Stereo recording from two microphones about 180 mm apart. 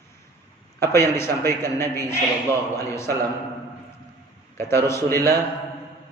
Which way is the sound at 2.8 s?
15° left (ahead or behind).